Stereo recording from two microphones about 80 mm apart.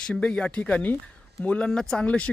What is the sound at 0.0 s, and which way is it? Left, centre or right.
Speech, centre.